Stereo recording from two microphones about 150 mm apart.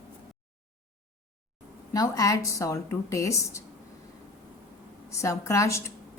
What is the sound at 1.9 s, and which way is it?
A woman's voice, 25° left (ahead or behind).